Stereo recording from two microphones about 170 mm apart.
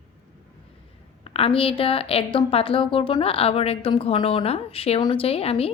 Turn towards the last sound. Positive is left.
turn(degrees=35)  # may be behind; listen again after turning